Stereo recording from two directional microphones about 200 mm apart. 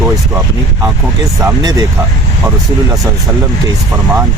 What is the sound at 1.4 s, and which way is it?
Speech, 20° right (ahead or behind).